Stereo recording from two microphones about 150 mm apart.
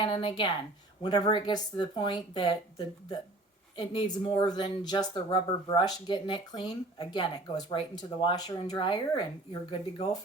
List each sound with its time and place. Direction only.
0.0 s a woman's voice: 35° left (ahead or behind)